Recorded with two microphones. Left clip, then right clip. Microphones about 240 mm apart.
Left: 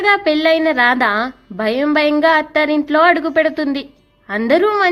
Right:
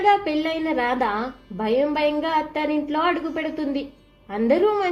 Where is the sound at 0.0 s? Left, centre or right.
Left.